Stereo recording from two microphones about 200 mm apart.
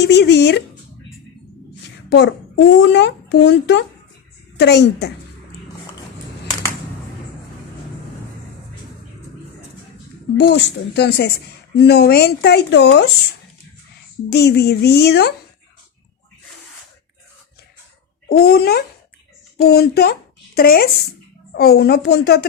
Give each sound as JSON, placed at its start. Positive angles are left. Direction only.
{"t": 0.0, "sound": "speech", "side_deg": 55}
{"t": 2.0, "sound": "a woman's voice", "side_deg": 60}
{"t": 10.3, "sound": "speech", "side_deg": 55}
{"t": 14.3, "sound": "speech", "side_deg": 55}
{"t": 18.3, "sound": "a woman's voice", "side_deg": 50}